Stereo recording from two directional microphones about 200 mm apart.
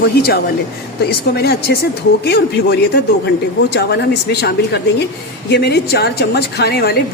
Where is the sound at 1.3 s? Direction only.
55° left (ahead or behind).